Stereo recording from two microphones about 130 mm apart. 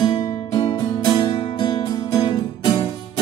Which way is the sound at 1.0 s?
45° left (ahead or behind).